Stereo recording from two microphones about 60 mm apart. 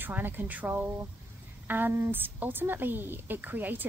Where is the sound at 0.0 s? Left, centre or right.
Right.